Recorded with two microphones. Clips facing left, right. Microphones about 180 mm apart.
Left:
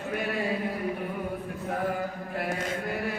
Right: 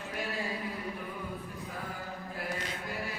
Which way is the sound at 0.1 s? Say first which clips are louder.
Left 7 dB; 60° left (ahead or behind).